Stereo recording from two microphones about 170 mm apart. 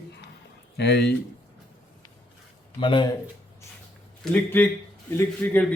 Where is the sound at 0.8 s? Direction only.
75° left (ahead or behind).